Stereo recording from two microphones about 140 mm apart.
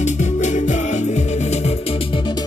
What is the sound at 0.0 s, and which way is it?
Music, 55° left (ahead or behind).